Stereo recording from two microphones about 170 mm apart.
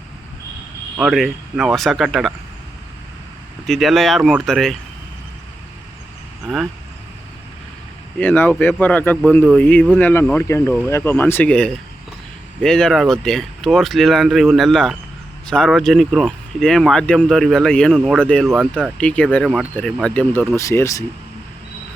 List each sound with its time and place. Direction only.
0.9 s speech: centre (ahead or behind)
3.7 s speech: centre (ahead or behind)
8.2 s speech: 10° left (ahead or behind)